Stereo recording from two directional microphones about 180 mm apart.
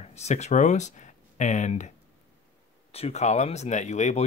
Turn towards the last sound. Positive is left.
turn(degrees=40)  # may be behind; listen again after turning